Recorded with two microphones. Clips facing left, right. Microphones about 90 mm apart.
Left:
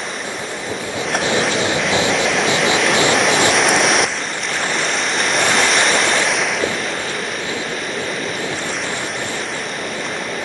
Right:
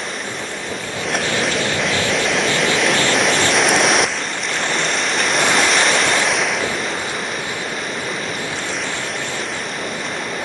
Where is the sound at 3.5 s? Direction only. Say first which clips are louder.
Even; centre (ahead or behind).